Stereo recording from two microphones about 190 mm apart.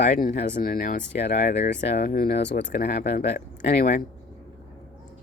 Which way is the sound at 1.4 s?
60° left (ahead or behind).